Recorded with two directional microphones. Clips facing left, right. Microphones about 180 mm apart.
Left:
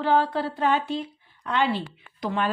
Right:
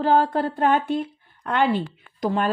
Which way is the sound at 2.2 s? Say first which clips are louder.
Right 4 dB; 40° right (ahead or behind).